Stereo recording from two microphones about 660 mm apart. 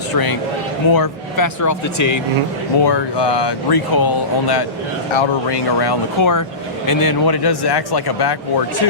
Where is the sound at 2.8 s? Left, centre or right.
Left.